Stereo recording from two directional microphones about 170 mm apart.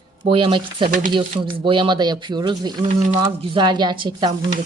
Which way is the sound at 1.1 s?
30° right (ahead or behind).